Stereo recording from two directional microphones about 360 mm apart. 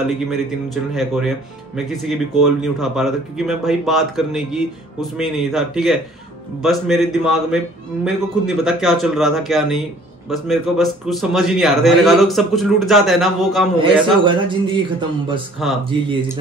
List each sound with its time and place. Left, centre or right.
0.9 s a man's voice: centre
13.7 s speech: centre